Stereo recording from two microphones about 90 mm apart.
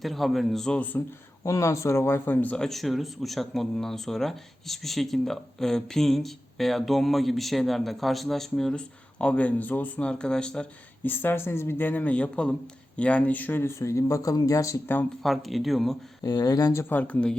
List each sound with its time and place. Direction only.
0.0 s speech: centre (ahead or behind)
1.5 s speech: 35° left (ahead or behind); by 2.6 s 15° left (ahead or behind)
2.6 s speech: centre (ahead or behind)
11.0 s speech: 25° left (ahead or behind)
15.2 s speech: centre (ahead or behind)
16.2 s speech: 45° left (ahead or behind)
16.9 s speech: 15° left (ahead or behind)